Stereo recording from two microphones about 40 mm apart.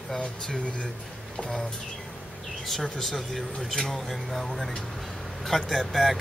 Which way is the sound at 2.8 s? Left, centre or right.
Centre.